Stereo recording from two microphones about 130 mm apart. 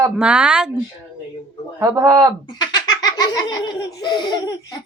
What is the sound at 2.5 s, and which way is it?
Laughter, 35° left (ahead or behind).